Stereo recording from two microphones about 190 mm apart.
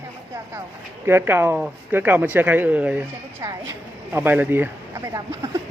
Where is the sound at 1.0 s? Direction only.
10° right (ahead or behind).